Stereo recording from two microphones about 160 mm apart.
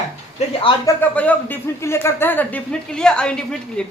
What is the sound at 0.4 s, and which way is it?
Speech, 40° left (ahead or behind).